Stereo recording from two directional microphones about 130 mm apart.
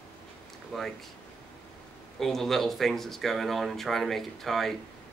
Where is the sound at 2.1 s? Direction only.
Centre (ahead or behind).